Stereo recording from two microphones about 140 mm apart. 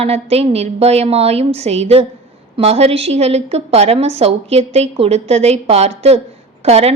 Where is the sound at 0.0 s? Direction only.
45° right (ahead or behind).